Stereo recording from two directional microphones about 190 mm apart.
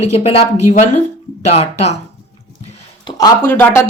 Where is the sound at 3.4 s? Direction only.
10° left (ahead or behind).